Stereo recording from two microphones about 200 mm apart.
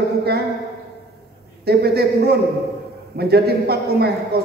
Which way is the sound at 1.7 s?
50° right (ahead or behind).